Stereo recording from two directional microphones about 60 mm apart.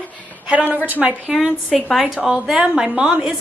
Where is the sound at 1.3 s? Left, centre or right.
Centre.